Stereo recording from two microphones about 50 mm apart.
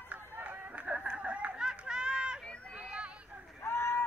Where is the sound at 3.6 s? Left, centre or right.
Left.